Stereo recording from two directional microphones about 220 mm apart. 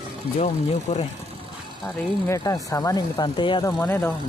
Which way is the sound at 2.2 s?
15° left (ahead or behind).